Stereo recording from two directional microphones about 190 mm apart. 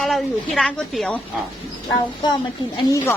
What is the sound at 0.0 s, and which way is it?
A woman's voice, 5° left (ahead or behind).